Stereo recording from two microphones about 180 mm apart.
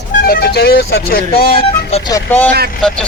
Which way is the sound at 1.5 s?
25° left (ahead or behind).